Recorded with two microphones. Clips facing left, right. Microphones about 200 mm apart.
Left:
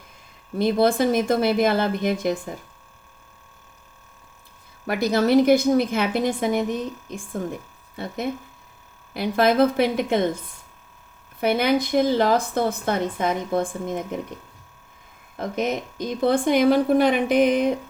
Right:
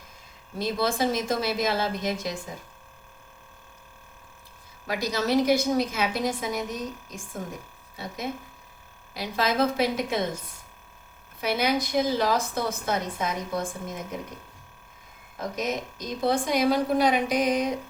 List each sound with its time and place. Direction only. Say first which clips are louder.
0.6 s a woman's voice: left 7 dB; 55° left (ahead or behind)
4.9 s a woman's voice: left 7 dB; 55° left (ahead or behind)
7.9 s a woman's voice: left 5 dB; 55° left (ahead or behind)
11.3 s a woman's voice: left 5 dB; 55° left (ahead or behind)
15.4 s a woman's voice: left 5 dB; 55° left (ahead or behind)